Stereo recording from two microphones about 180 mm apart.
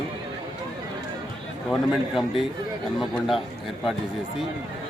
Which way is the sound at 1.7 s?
Centre (ahead or behind).